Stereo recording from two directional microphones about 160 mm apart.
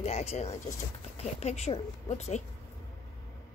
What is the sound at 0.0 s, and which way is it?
Speech, 45° left (ahead or behind).